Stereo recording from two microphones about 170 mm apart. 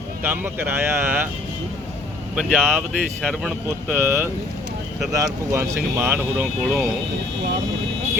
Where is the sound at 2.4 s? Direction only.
5° right (ahead or behind).